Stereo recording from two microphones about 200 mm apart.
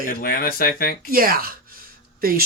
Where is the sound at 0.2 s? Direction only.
50° left (ahead or behind).